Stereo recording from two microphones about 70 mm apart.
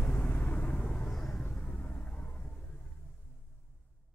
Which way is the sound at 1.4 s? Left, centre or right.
Left.